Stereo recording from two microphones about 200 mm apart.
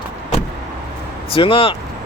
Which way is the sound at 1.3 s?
25° left (ahead or behind).